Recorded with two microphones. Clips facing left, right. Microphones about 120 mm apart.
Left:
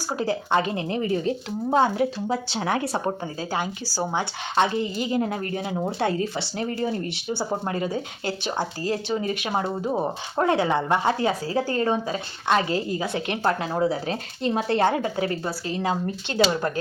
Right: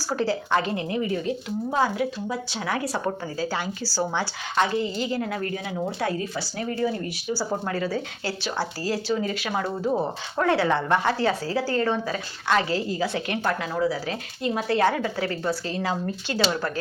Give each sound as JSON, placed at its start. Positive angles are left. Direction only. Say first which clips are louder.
{"t": 0.2, "sound": "speech", "louder": "left 1 dB", "side_deg": 20}
{"t": 3.5, "sound": "speech", "louder": "left 1 dB", "side_deg": 15}